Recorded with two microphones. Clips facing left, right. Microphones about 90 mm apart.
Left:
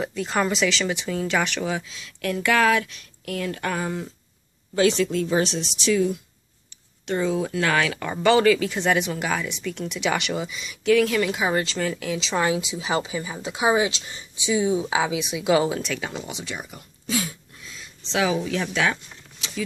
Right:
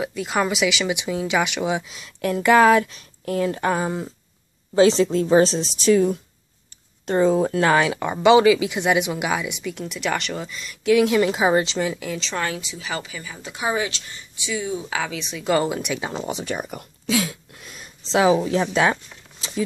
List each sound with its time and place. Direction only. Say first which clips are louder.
0.0 s a woman's voice: right 1 dB; 5° right (ahead or behind)
11.1 s a woman's voice: right 5 dB; 25° right (ahead or behind)
11.9 s speech: left 1 dB; centre (ahead or behind)
12.4 s speech: left 7 dB; 15° left (ahead or behind)
16.0 s a woman's voice: right 4 dB; 30° right (ahead or behind); by 16.8 s 50° right (ahead or behind)
17.0 s a sound: right 4 dB; 90° right; by 17.8 s 60° right (ahead or behind)
18.1 s a woman's voice: right 6 dB; 30° right (ahead or behind)